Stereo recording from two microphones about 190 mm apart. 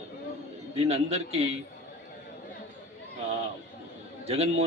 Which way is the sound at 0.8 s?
35° right (ahead or behind).